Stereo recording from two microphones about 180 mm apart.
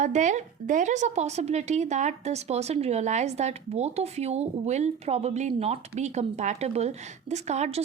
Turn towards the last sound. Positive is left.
turn(degrees=-40)  # may be behind; listen again after turning